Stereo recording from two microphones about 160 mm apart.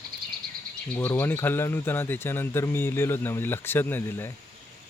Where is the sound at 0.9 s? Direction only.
10° left (ahead or behind).